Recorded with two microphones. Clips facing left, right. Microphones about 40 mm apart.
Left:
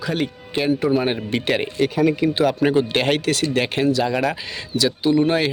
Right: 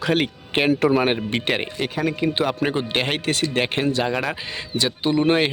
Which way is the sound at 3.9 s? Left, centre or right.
Right.